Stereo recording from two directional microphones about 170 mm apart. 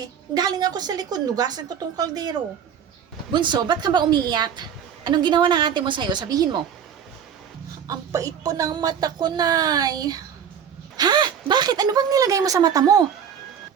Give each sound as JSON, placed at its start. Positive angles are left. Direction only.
{"t": 0.0, "sound": "a woman's voice", "side_deg": -25}
{"t": 3.3, "sound": "a woman's voice", "side_deg": -25}
{"t": 7.9, "sound": "a woman's voice", "side_deg": -20}